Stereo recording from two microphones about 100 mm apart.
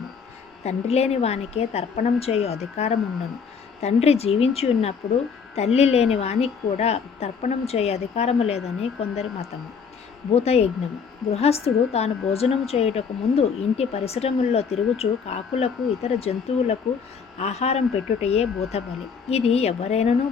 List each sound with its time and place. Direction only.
0.6 s a woman's voice: 90° left